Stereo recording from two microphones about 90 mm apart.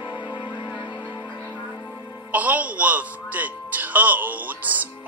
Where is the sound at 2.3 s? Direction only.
15° right (ahead or behind).